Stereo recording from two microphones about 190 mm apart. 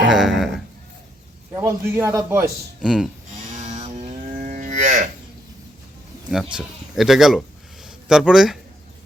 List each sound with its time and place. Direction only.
0.0 s a sound: 5° right (ahead or behind)
1.5 s a man's voice: 15° right (ahead or behind)
2.8 s speech: 5° right (ahead or behind)
3.4 s livestock: 40° right (ahead or behind)
6.5 s speech: 5° right (ahead or behind)